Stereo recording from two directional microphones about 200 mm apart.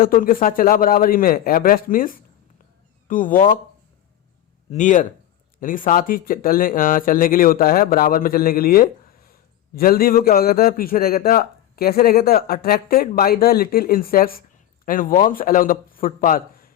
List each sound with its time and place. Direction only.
0.0 s speech: 45° left (ahead or behind)
4.7 s a man's voice: 40° left (ahead or behind)